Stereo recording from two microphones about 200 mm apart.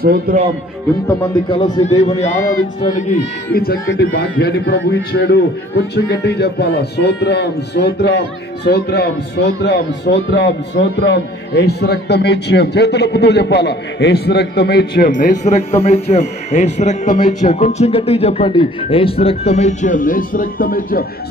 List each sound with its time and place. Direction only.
0.0 s speech: 50° right (ahead or behind)
2.8 s speech: 40° left (ahead or behind)
3.5 s speech: 50° left (ahead or behind)
15.0 s speech: 40° left (ahead or behind)